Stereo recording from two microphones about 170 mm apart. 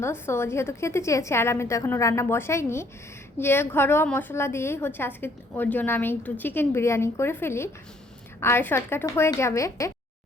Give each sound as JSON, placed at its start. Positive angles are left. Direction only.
{"t": 0.0, "sound": "a woman's voice", "side_deg": 15}